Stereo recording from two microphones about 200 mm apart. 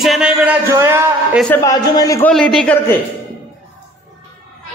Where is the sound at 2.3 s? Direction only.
5° left (ahead or behind).